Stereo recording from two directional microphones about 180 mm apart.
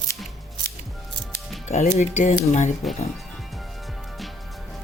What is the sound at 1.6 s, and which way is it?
Speech, 40° left (ahead or behind).